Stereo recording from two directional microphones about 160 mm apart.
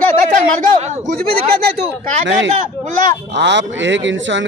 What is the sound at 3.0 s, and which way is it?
Speech, 90° right.